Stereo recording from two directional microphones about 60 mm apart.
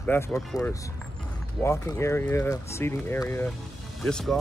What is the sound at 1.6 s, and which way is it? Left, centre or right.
Speech, left.